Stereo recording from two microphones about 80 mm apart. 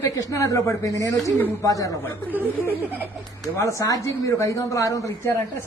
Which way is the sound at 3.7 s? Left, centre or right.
Left.